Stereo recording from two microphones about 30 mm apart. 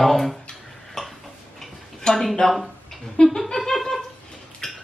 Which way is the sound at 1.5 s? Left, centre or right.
Centre.